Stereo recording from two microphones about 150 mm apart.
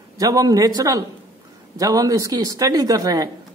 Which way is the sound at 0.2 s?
25° right (ahead or behind).